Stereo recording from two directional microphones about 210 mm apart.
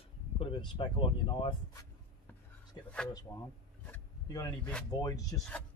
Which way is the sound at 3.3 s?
15° left (ahead or behind).